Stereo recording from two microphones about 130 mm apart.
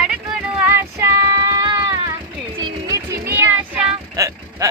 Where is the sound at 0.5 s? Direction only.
15° right (ahead or behind).